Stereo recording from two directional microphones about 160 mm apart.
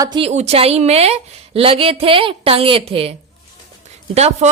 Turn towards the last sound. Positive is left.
turn(degrees=-45)  # may be behind; listen again after turning